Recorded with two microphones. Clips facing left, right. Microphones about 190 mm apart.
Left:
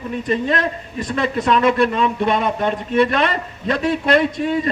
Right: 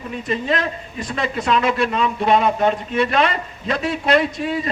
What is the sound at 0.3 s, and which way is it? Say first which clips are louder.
A man's voice: left 2 dB; 50° left (ahead or behind).